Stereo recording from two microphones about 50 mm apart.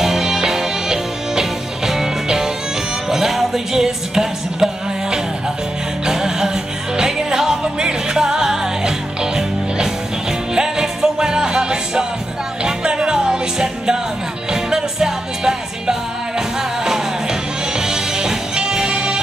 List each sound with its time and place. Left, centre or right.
0.0 s music: centre
6.0 s music: centre